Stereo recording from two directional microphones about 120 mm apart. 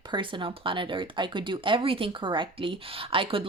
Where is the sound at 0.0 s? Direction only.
40° right (ahead or behind).